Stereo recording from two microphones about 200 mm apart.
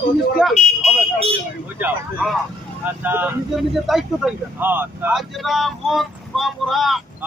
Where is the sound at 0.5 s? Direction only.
35° left (ahead or behind).